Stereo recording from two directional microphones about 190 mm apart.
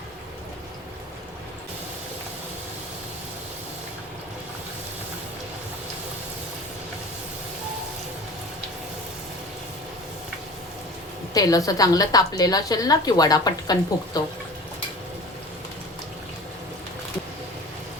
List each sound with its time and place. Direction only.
11.3 s a woman's voice: 20° left (ahead or behind)